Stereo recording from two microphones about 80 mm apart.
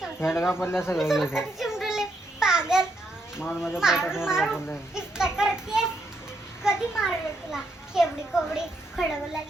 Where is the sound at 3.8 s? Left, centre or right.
Centre.